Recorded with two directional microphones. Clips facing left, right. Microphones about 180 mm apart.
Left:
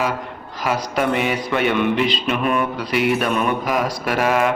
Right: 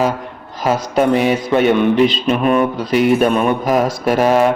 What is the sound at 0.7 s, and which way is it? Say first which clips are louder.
A man's voice: right 6 dB; 35° right (ahead or behind).